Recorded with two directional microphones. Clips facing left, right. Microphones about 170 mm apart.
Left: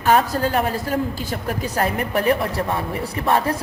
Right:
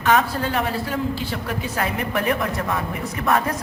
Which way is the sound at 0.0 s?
35° left (ahead or behind).